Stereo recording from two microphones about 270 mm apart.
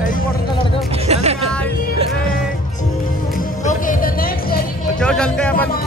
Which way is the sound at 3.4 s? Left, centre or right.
Left.